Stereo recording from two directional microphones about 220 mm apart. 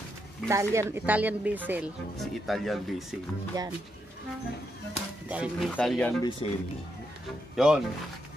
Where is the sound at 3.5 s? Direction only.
15° right (ahead or behind).